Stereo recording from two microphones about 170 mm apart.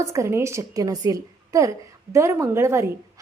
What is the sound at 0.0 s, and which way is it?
A woman's voice, 15° right (ahead or behind).